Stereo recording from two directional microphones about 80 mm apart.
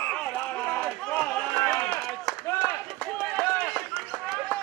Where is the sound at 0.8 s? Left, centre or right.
Centre.